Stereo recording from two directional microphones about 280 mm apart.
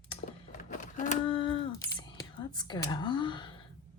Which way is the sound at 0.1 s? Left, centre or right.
Left.